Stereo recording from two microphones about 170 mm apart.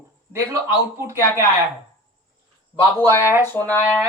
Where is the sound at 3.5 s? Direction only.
10° left (ahead or behind).